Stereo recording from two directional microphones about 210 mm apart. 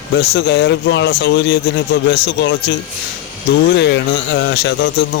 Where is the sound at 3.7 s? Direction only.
55° left (ahead or behind).